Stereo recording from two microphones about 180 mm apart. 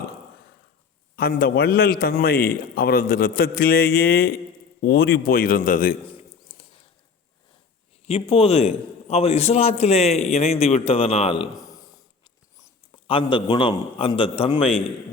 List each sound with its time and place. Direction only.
1.1 s a man's voice: 55° left (ahead or behind)
8.0 s a man's voice: 30° left (ahead or behind)
13.1 s a man's voice: 30° left (ahead or behind)